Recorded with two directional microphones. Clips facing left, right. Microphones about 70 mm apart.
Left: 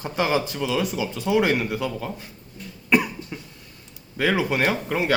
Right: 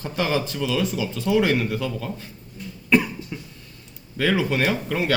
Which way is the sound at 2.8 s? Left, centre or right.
Centre.